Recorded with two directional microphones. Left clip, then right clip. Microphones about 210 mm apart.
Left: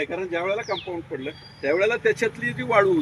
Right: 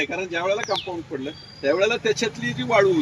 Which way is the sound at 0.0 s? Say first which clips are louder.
Right 1 dB; 40° right (ahead or behind).